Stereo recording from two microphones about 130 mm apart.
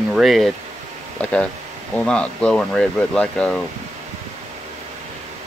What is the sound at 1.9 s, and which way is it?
Speech, 5° left (ahead or behind).